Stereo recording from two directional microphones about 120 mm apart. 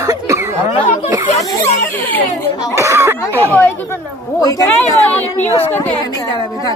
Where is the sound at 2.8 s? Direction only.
25° right (ahead or behind).